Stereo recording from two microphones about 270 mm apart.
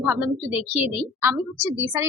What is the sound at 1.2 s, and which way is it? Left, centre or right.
Speech, centre.